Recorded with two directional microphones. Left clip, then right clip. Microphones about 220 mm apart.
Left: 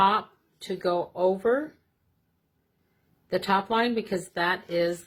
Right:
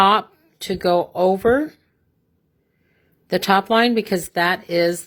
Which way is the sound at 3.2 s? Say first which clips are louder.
Right 8 dB; 45° right (ahead or behind).